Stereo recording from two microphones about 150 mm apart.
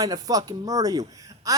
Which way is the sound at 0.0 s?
25° right (ahead or behind).